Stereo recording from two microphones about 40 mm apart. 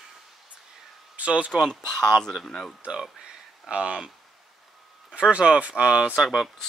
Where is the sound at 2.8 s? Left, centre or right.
Right.